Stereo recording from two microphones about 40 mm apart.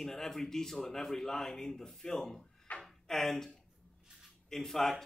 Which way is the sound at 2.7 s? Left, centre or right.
Left.